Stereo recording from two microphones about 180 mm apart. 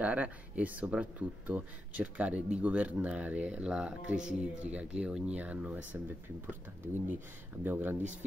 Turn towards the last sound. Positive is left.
turn(degrees=-10)  # may be behind; listen again after turning